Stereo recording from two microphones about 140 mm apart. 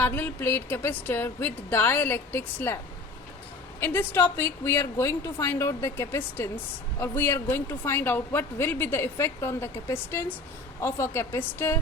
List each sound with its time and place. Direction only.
0.0 s speech: 15° left (ahead or behind)
3.8 s a woman's voice: 15° left (ahead or behind)